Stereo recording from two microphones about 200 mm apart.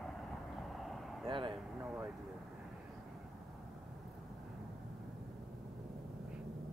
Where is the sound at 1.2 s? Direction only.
25° right (ahead or behind).